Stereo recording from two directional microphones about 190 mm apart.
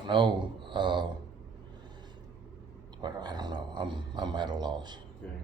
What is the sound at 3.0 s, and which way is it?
Speech, 20° right (ahead or behind).